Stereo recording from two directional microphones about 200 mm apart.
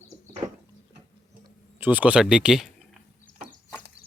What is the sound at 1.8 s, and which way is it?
Speech, 10° right (ahead or behind).